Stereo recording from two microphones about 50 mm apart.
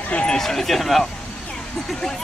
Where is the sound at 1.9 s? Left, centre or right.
Centre.